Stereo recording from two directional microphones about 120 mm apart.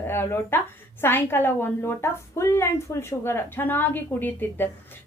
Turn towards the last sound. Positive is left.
turn(degrees=15)  # may be behind; listen again after turning